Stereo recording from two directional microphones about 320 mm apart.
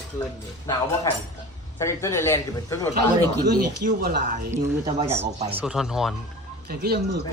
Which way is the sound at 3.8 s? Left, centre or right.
Right.